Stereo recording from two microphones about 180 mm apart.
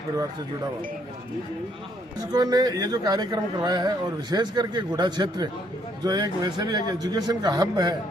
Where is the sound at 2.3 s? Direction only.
20° right (ahead or behind).